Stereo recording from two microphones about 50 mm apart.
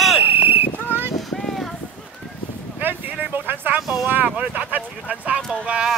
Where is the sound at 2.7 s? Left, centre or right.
Right.